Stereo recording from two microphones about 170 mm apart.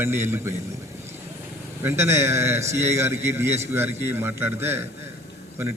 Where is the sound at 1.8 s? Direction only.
15° right (ahead or behind).